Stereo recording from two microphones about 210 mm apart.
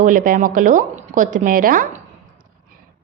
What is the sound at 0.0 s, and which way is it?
A woman's voice, 40° right (ahead or behind).